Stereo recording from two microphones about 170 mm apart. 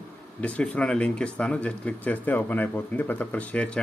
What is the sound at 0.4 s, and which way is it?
Speech, 10° left (ahead or behind).